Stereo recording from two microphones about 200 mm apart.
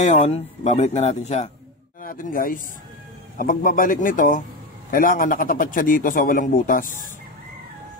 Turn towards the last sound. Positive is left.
turn(degrees=45)  # may be behind; listen again after turning